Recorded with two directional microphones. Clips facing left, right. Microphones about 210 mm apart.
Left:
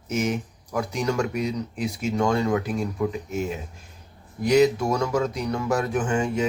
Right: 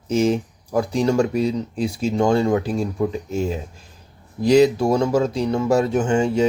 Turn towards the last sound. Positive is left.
turn(degrees=-30)  # may be behind; listen again after turning